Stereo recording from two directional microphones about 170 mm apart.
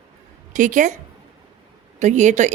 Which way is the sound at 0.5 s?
50° right (ahead or behind).